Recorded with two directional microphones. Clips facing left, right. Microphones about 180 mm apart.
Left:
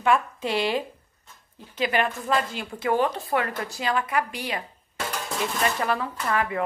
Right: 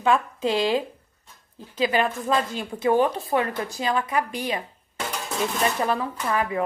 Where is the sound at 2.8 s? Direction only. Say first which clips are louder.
Right 3 dB; 20° right (ahead or behind).